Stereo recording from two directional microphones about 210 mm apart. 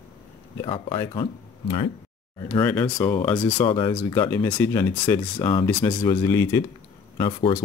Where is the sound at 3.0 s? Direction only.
20° left (ahead or behind).